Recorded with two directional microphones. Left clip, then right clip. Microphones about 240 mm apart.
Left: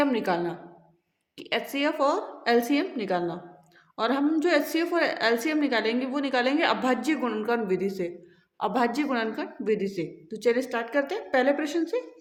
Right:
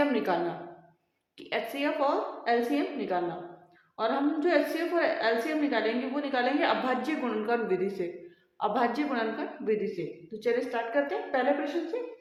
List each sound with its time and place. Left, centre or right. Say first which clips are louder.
0.0 s a woman's voice: left 2 dB; left